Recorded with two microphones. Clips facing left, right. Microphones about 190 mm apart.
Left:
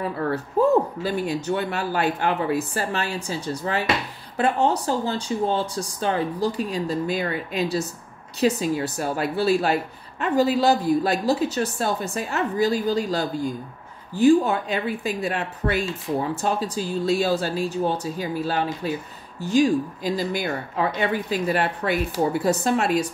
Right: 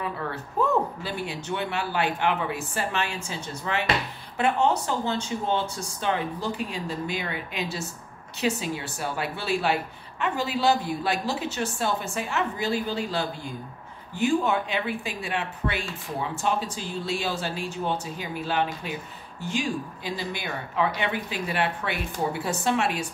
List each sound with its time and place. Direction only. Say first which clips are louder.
0.0 s speech: left 6 dB; 40° left (ahead or behind)